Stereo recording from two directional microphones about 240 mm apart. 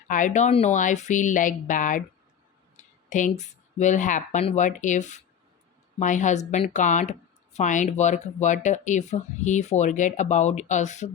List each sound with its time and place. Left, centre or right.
0.1 s a woman's voice: left